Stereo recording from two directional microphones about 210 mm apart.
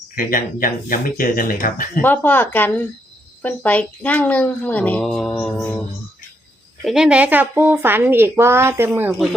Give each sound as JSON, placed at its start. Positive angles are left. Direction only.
{"t": 0.2, "sound": "speech", "side_deg": 40}
{"t": 2.0, "sound": "a woman's voice", "side_deg": 10}
{"t": 6.8, "sound": "speech", "side_deg": -5}